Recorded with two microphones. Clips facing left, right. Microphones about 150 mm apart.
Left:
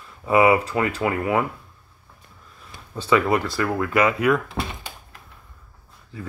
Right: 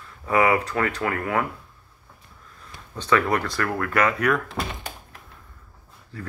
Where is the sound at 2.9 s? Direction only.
10° left (ahead or behind).